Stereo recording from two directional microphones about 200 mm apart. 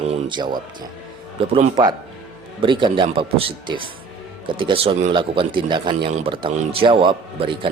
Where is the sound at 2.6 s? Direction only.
25° right (ahead or behind).